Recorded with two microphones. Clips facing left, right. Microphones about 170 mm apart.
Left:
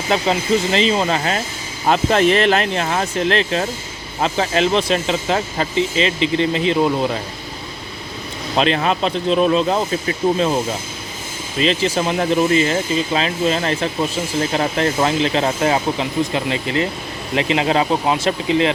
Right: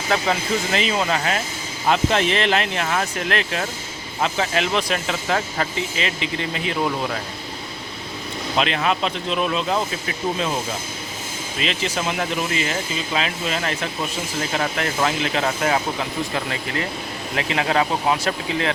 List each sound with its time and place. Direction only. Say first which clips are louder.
0.1 s speech: left 4 dB; 25° left (ahead or behind)
1.9 s speech: left 5 dB; 45° left (ahead or behind); by 7.2 s 25° left (ahead or behind)
8.5 s speech: left 4 dB; 35° left (ahead or behind)
11.6 s speech: left 7 dB; 35° left (ahead or behind)